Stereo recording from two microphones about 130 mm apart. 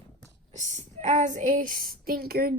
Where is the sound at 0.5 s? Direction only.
65° right (ahead or behind); by 1.9 s 90° right.